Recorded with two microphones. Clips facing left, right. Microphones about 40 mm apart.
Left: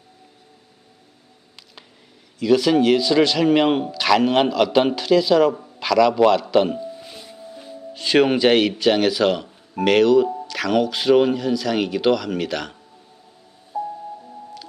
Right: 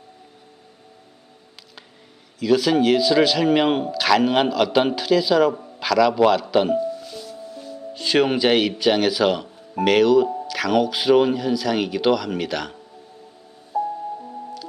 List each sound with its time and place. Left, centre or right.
2.3 s speech: centre
6.8 s music: left
7.9 s speech: centre
13.7 s music: centre